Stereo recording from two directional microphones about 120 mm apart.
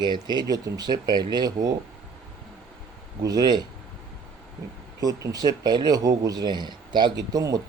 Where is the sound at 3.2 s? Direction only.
35° right (ahead or behind).